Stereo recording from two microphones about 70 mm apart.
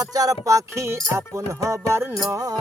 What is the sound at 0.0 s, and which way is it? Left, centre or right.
Music, right.